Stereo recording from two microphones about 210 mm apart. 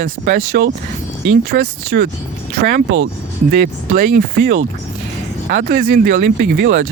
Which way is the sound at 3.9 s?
40° right (ahead or behind).